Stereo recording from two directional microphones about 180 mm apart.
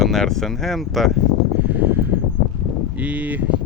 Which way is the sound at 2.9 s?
10° right (ahead or behind).